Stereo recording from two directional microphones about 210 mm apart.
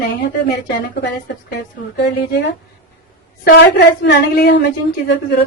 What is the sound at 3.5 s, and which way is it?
A woman's voice, 50° left (ahead or behind).